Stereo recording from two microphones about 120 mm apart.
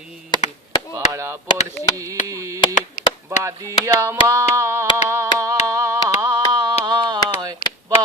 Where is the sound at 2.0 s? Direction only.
25° right (ahead or behind).